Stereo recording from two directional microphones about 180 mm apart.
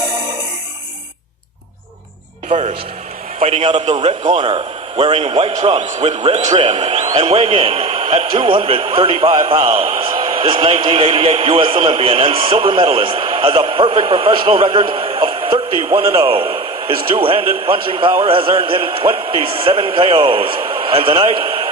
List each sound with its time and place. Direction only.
2.5 s a man's voice: 35° right (ahead or behind)